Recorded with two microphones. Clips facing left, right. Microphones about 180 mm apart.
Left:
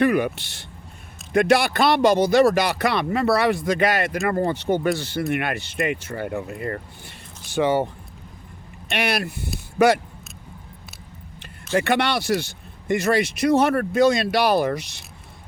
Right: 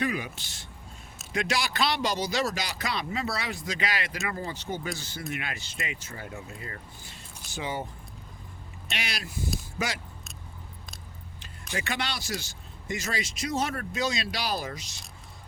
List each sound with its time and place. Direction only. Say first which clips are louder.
0.0 s speech: left 11 dB; 65° left (ahead or behind)
8.9 s speech: left 13 dB; 60° left (ahead or behind)
11.7 s speech: left 12 dB; 60° left (ahead or behind)